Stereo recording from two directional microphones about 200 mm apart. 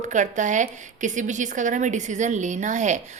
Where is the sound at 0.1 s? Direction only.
40° right (ahead or behind).